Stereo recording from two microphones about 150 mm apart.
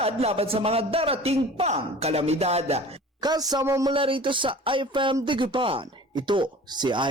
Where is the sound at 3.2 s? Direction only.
25° right (ahead or behind).